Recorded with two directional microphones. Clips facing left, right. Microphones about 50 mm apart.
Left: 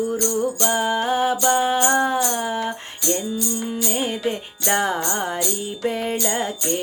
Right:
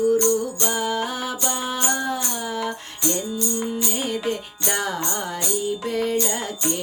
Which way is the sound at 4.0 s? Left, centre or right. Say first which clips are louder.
Left 2 dB; left.